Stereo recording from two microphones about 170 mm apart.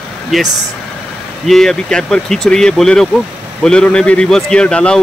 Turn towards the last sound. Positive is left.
turn(degrees=5)  # may be behind; listen again after turning